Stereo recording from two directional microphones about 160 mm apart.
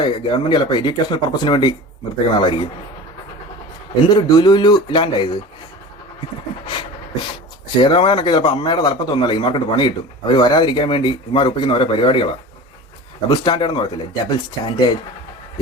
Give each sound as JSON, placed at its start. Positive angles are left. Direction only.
{"t": 0.0, "sound": "a man's voice", "side_deg": 30}
{"t": 4.1, "sound": "a man's voice", "side_deg": 25}
{"t": 7.8, "sound": "a man's voice", "side_deg": 30}